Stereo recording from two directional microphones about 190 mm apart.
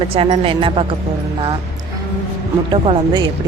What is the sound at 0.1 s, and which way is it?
Speech, 30° right (ahead or behind).